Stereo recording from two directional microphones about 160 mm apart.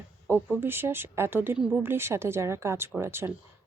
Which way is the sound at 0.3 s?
15° right (ahead or behind).